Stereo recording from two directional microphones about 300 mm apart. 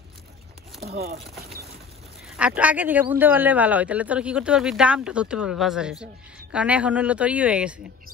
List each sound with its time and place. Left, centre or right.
0.8 s speech: right
1.4 s boat: right
2.2 s a man's voice: centre